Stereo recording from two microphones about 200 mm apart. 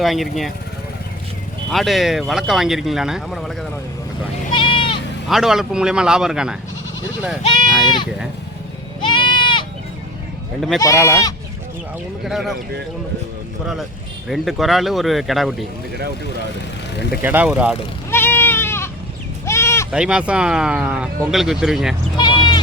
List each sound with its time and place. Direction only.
0.0 s speech: centre (ahead or behind)
1.7 s speech: centre (ahead or behind)
4.5 s sheep: 25° left (ahead or behind)
5.3 s speech: centre (ahead or behind)
7.4 s speech: 20° left (ahead or behind)
9.0 s goat: 25° left (ahead or behind)
10.8 s speech: 15° left (ahead or behind)
12.2 s speech: centre (ahead or behind)
14.3 s speech: centre (ahead or behind)
17.2 s speech: 10° right (ahead or behind)
18.1 s goat: 10° left (ahead or behind)
19.5 s sheep: 15° left (ahead or behind)
19.9 s speech: 5° right (ahead or behind)
22.2 s sheep: 20° left (ahead or behind)